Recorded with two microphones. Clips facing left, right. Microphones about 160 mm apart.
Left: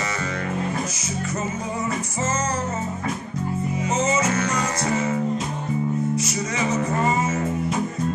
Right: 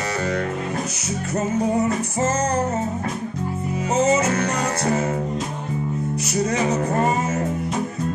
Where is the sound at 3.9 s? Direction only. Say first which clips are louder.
Right 4 dB; 60° right (ahead or behind).